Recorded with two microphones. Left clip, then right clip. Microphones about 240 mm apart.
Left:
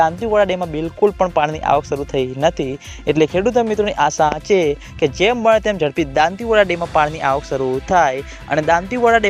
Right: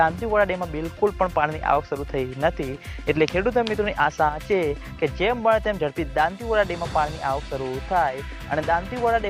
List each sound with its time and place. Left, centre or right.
0.0 s speech: left